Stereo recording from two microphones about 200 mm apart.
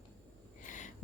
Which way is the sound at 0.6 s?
40° left (ahead or behind).